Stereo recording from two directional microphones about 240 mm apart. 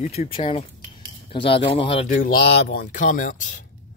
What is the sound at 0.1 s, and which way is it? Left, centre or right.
Speech, left.